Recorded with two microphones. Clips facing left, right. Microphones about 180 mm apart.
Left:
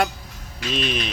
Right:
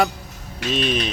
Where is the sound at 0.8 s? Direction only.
40° right (ahead or behind).